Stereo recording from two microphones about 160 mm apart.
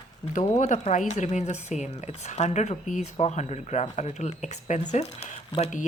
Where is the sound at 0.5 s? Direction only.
45° left (ahead or behind).